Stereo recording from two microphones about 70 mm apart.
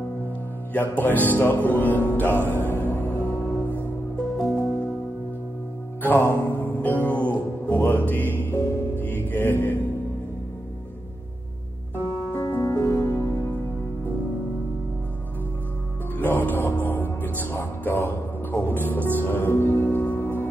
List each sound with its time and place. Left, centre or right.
0.7 s speech: left
2.5 s music: left
4.4 s music: centre
6.6 s music: left
12.0 s music: left
13.0 s music: left
16.2 s music: left